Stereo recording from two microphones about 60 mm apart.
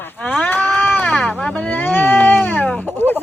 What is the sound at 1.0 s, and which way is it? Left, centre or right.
Speech, centre.